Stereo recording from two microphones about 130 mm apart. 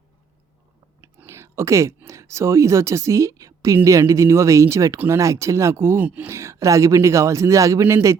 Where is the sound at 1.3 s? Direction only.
20° right (ahead or behind).